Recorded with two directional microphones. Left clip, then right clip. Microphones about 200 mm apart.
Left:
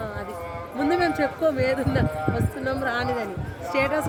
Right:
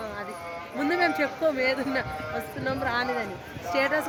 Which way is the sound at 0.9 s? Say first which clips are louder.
Left 2 dB; 10° left (ahead or behind).